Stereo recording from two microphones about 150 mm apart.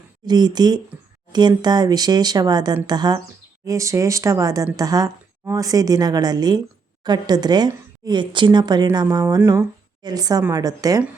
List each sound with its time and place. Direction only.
0.3 s a woman's voice: 30° right (ahead or behind)